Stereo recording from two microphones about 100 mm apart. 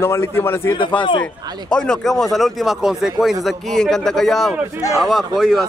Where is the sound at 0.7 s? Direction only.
55° left (ahead or behind).